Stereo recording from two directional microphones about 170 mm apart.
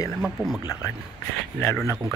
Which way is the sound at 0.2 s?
Centre (ahead or behind).